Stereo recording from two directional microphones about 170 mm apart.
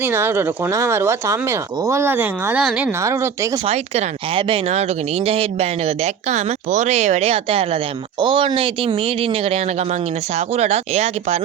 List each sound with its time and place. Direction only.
0.0 s speech: 15° right (ahead or behind)
3.0 s speech: 15° right (ahead or behind)
3.7 s speech: 35° right (ahead or behind)